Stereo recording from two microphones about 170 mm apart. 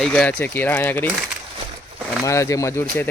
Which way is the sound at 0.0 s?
5° left (ahead or behind).